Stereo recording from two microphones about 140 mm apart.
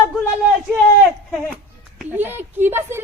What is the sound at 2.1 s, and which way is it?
Speech, 15° right (ahead or behind).